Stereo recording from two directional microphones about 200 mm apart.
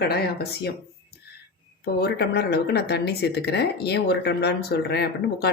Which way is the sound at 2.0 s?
55° left (ahead or behind).